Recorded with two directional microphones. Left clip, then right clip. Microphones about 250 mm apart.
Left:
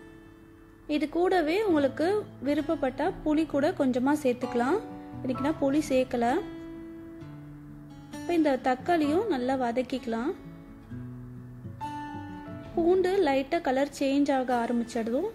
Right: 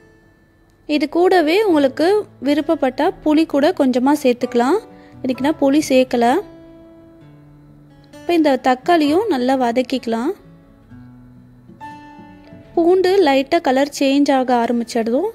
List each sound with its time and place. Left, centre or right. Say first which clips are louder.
0.8 s a woman's voice: right 11 dB; right
8.3 s a woman's voice: right 11 dB; right
12.7 s a woman's voice: right 11 dB; right